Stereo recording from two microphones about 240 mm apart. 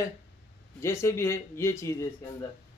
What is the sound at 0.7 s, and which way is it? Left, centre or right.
A man's voice, centre.